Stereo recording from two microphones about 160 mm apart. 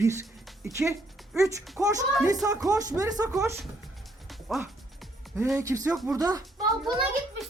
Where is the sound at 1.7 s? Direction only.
20° right (ahead or behind).